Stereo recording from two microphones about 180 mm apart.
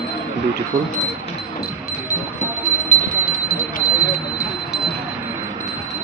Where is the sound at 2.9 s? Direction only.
50° left (ahead or behind).